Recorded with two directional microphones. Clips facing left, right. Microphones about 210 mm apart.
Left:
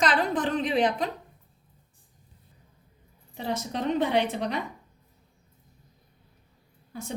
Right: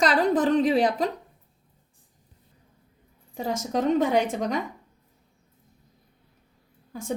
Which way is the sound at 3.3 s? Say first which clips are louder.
Right 4 dB; 45° right (ahead or behind).